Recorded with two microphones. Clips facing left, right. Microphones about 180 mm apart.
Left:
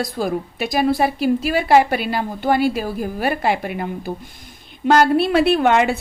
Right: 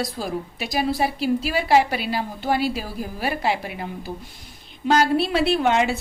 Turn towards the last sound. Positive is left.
turn(degrees=60)  # may be behind; listen again after turning